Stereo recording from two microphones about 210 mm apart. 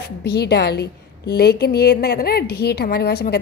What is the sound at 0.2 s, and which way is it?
A woman's voice, 50° left (ahead or behind).